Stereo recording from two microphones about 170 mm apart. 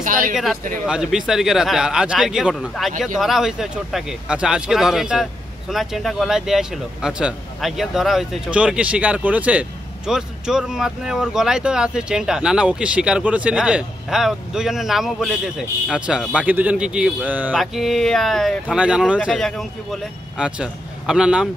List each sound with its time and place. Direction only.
0.0 s speech: 50° right (ahead or behind)
0.8 s speech: 5° right (ahead or behind)